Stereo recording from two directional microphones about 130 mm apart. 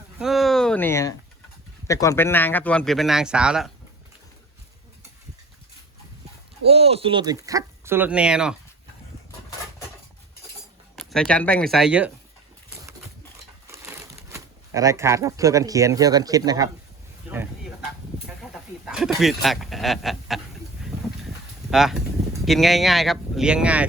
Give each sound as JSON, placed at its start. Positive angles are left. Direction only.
{"t": 0.2, "sound": "a sound", "side_deg": 0}
{"t": 0.9, "sound": "speech", "side_deg": 20}
{"t": 6.7, "sound": "speech", "side_deg": -50}
{"t": 7.9, "sound": "speech", "side_deg": -10}
{"t": 10.9, "sound": "speech", "side_deg": 5}
{"t": 13.7, "sound": "crushing", "side_deg": -20}
{"t": 14.3, "sound": "speech", "side_deg": -25}
{"t": 18.5, "sound": "speech", "side_deg": -5}
{"t": 21.7, "sound": "speech", "side_deg": -5}